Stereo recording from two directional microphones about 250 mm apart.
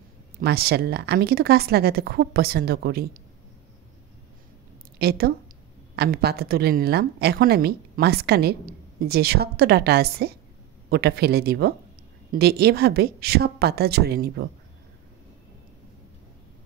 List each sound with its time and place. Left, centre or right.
0.4 s a woman's voice: right
4.9 s a woman's voice: right